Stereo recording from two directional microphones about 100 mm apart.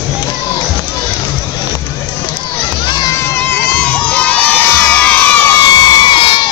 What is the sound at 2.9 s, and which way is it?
Music, 40° left (ahead or behind).